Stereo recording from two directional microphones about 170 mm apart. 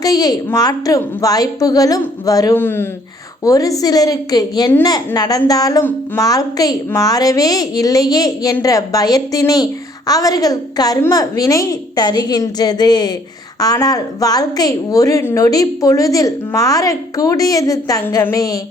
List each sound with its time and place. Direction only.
0.0 s a woman's voice: 20° left (ahead or behind)